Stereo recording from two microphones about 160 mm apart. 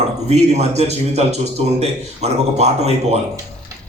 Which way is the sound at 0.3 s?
45° right (ahead or behind).